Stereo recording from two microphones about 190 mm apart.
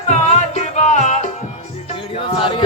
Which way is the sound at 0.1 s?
35° left (ahead or behind).